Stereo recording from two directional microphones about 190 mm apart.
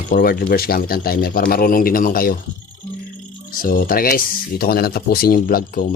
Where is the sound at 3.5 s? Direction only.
50° left (ahead or behind).